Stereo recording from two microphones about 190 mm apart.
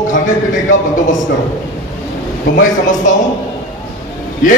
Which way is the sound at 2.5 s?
45° left (ahead or behind).